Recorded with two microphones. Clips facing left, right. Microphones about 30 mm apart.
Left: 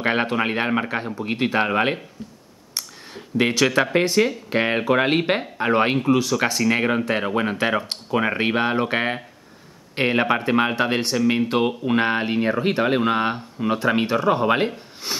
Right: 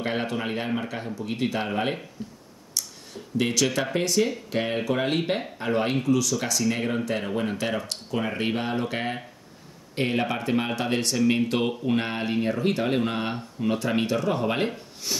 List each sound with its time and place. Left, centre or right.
0.0 s speech: left
2.8 s a sound: left
3.3 s speech: left